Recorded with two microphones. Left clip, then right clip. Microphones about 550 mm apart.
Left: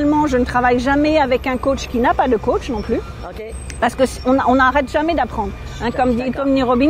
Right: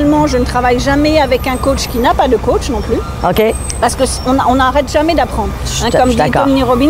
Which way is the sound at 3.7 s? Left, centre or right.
Left.